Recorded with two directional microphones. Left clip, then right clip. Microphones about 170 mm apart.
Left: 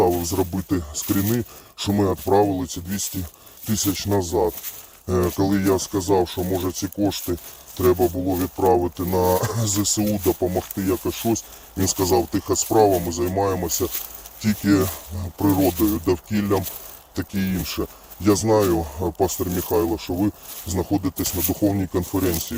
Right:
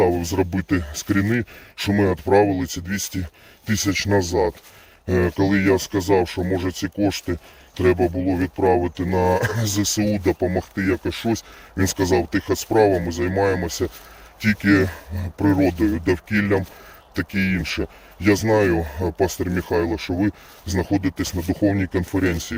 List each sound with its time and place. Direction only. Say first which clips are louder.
0.0 s speech: right 1 dB; 20° right (ahead or behind)